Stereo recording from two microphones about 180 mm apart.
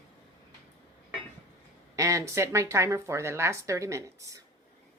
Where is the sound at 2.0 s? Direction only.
15° right (ahead or behind).